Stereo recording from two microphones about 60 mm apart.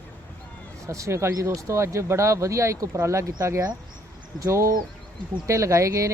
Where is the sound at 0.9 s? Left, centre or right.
Right.